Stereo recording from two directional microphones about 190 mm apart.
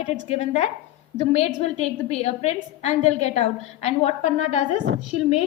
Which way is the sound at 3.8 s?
35° left (ahead or behind).